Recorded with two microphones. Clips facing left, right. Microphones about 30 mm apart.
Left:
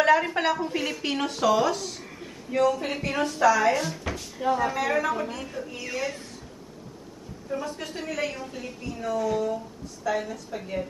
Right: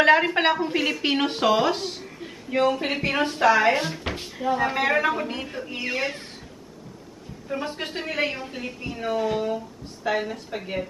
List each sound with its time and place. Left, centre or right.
0.0 s a woman's voice: right
7.4 s a woman's voice: right